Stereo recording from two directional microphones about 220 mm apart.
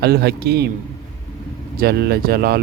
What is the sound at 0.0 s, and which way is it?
Speech, 45° right (ahead or behind).